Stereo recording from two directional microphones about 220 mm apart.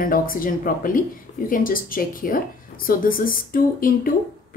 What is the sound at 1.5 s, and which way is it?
A woman's voice, 40° left (ahead or behind).